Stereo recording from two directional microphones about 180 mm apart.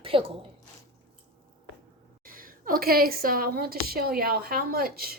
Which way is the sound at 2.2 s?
50° right (ahead or behind).